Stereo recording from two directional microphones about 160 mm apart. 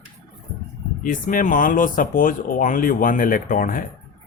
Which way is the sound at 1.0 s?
60° left (ahead or behind).